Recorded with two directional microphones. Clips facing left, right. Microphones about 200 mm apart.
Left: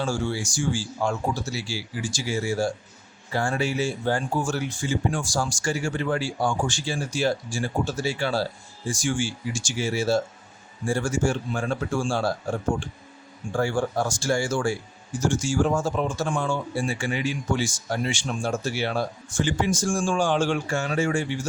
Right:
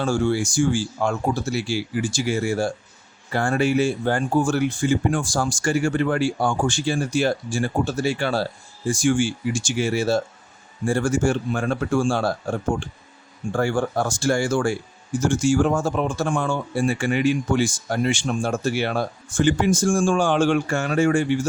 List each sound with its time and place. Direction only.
0.0 s speech: 55° right (ahead or behind)
13.5 s speech: 60° right (ahead or behind)